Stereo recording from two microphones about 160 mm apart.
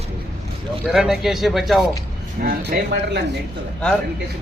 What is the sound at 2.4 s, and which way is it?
Speech, 75° right (ahead or behind).